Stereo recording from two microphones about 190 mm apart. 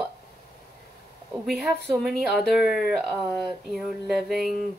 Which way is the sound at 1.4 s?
Centre (ahead or behind).